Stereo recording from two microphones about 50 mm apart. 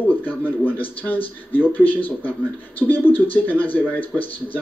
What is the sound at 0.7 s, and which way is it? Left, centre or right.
Speech, left.